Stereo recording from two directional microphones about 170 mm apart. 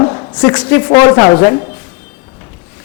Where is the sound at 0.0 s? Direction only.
25° left (ahead or behind).